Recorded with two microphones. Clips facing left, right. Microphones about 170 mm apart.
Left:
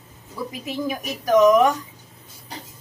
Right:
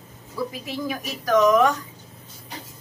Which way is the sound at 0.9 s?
15° left (ahead or behind).